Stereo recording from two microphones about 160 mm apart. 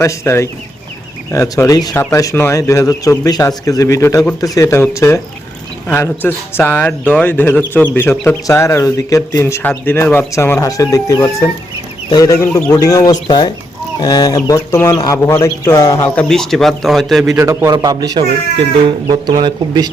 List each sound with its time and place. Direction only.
0.0 s speech: 15° left (ahead or behind); by 17.3 s centre (ahead or behind)
17.3 s a man's voice: 15° right (ahead or behind)